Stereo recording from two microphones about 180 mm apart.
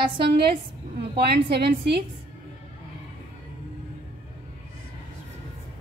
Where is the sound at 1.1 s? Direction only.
65° right (ahead or behind).